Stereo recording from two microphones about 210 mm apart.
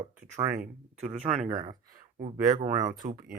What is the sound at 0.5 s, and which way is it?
Speech, 5° right (ahead or behind).